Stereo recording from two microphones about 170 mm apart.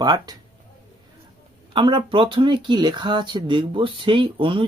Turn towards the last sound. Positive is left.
turn(degrees=-30)  # may be behind; listen again after turning